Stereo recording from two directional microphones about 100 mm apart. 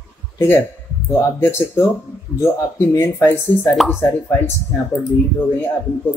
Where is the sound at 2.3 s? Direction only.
30° left (ahead or behind).